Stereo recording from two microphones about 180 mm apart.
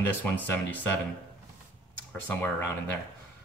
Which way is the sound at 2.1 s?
10° left (ahead or behind).